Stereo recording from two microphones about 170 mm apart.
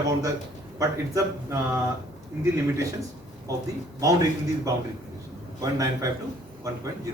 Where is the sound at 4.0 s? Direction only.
20° right (ahead or behind).